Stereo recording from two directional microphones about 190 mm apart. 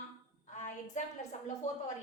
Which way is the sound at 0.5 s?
40° left (ahead or behind).